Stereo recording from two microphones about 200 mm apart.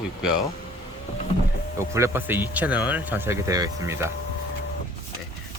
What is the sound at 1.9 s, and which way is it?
Speech, 10° right (ahead or behind).